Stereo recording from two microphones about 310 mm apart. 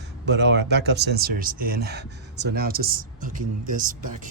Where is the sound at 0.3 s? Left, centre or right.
Right.